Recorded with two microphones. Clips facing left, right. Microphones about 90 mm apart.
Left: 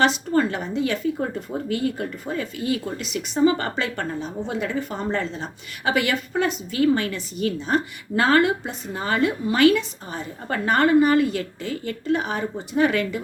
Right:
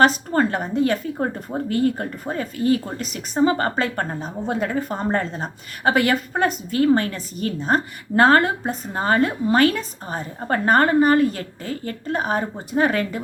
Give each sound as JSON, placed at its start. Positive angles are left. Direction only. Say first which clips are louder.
{"t": 0.0, "sound": "a woman's voice", "louder": "right 2 dB", "side_deg": -45}